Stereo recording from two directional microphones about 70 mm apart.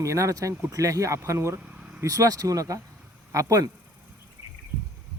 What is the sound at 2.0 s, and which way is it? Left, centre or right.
Speech, right.